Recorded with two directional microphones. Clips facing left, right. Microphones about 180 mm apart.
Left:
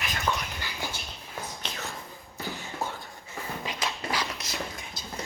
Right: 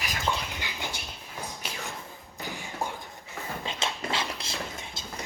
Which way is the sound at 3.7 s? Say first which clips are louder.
Right 1 dB; 25° right (ahead or behind).